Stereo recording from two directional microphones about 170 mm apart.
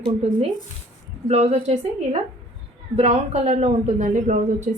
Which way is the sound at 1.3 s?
40° right (ahead or behind).